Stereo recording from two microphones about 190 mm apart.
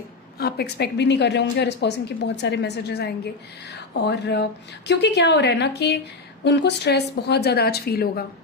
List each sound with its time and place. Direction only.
0.3 s a woman's voice: 55° left (ahead or behind)